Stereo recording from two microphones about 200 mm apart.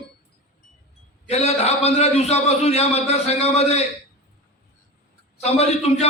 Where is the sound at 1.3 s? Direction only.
30° left (ahead or behind).